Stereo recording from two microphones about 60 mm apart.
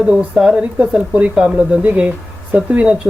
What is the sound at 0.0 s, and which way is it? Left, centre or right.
Speech, centre.